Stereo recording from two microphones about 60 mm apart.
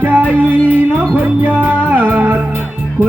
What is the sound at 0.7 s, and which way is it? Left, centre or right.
Music, right.